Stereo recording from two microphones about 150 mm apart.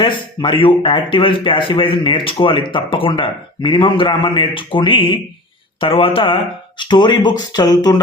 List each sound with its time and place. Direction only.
0.0 s speech: 35° left (ahead or behind)